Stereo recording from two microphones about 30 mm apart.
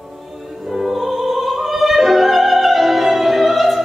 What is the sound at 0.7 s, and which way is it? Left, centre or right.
Music, centre.